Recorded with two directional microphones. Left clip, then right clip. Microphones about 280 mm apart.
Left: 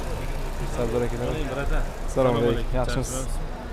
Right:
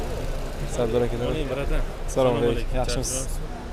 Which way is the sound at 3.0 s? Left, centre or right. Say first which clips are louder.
Right 1 dB; left.